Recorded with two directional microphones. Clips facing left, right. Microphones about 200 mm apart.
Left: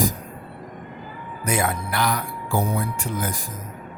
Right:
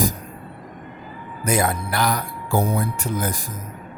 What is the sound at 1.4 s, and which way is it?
Speech, 40° right (ahead or behind).